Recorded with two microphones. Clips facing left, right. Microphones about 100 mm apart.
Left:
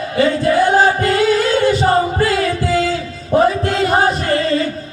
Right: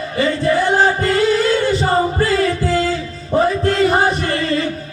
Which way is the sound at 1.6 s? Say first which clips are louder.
Left 2 dB; 80° left.